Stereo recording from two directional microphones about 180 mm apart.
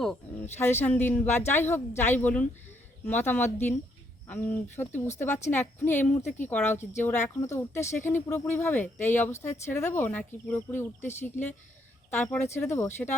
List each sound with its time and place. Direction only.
0.5 s speech: 10° left (ahead or behind)